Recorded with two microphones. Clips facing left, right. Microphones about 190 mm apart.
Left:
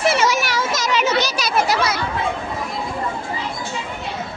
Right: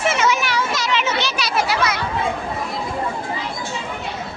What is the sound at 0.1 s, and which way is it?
Children playing, 40° left (ahead or behind).